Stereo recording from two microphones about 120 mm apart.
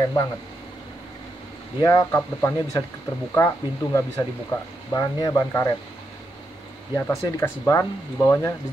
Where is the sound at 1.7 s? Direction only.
30° left (ahead or behind).